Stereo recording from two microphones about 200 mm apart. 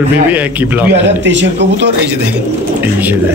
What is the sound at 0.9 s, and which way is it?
Speech, 60° right (ahead or behind).